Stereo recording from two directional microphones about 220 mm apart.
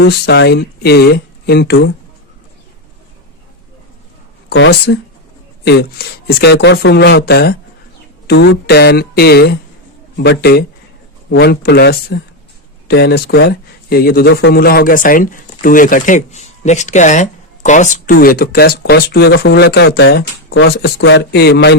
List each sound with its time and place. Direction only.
0.0 s speech: 50° left (ahead or behind)
4.4 s speech: 55° left (ahead or behind)